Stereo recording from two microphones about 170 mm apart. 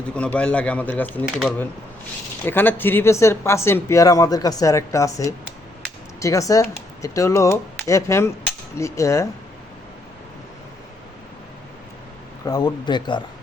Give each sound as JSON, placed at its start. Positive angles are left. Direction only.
{"t": 0.1, "sound": "speech", "side_deg": 5}
{"t": 2.5, "sound": "speech", "side_deg": 10}
{"t": 12.5, "sound": "speech", "side_deg": 25}